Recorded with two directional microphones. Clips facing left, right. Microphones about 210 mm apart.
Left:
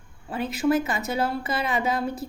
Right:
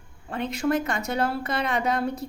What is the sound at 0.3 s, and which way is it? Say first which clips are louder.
A woman's voice: left 2 dB; 5° left (ahead or behind).